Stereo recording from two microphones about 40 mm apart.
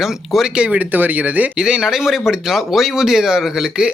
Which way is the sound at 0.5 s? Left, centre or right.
Right.